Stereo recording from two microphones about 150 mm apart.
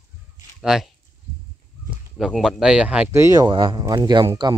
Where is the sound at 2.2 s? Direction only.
Centre (ahead or behind).